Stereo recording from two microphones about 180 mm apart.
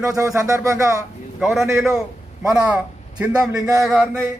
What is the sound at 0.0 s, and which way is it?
Speech, 15° right (ahead or behind).